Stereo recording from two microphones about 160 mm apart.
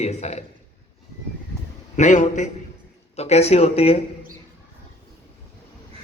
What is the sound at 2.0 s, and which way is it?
A man's voice, 50° left (ahead or behind).